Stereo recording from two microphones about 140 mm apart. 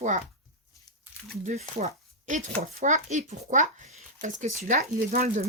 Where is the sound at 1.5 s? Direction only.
60° right (ahead or behind).